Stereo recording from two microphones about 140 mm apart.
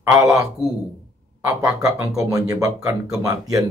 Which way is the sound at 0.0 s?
20° right (ahead or behind).